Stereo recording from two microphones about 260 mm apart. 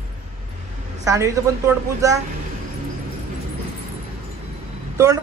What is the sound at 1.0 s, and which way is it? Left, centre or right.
Speech, centre.